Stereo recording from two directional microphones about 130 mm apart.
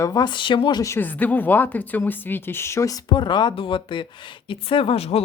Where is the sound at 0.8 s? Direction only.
15° left (ahead or behind).